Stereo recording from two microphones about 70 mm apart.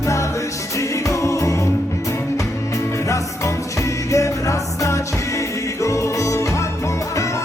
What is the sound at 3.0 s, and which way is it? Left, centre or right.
Music, left.